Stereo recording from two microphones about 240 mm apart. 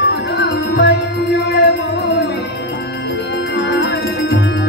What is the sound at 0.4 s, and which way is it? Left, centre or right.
Music, left.